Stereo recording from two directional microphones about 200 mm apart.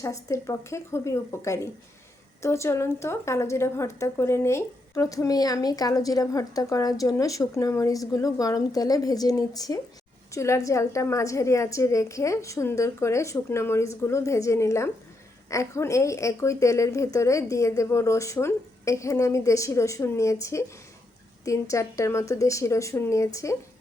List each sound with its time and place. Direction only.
0.0 s speech: 15° left (ahead or behind)